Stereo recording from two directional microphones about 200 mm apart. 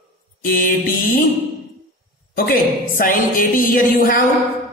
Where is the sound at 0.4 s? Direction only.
45° left (ahead or behind).